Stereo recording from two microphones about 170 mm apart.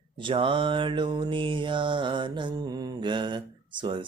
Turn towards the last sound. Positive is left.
turn(degrees=-30)  # may be behind; listen again after turning